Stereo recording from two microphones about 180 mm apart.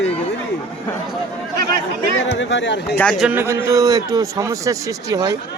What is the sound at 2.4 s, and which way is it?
Speech, 90° left.